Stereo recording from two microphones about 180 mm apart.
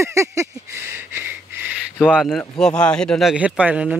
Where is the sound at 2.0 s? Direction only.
Centre (ahead or behind).